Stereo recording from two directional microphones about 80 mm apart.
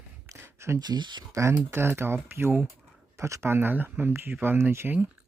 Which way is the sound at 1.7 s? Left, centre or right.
Right.